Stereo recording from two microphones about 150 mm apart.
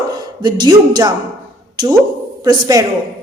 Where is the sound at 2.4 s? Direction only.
25° right (ahead or behind).